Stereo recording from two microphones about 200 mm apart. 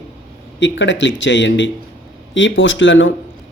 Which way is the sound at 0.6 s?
65° left (ahead or behind).